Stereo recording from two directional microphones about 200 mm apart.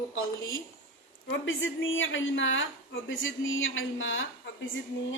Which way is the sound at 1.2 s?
65° left (ahead or behind).